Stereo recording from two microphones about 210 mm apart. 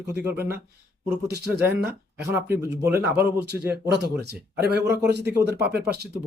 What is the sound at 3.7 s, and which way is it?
Speech, 50° right (ahead or behind).